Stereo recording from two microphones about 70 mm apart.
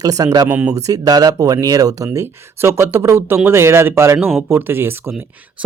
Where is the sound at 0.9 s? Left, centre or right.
Right.